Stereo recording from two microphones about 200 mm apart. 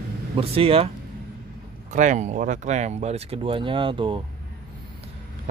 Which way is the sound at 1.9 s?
35° right (ahead or behind).